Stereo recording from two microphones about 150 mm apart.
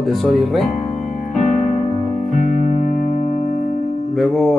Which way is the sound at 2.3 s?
45° left (ahead or behind).